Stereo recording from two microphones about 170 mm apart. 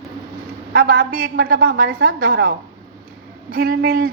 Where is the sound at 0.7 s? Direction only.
70° right (ahead or behind); by 2.5 s 90° right.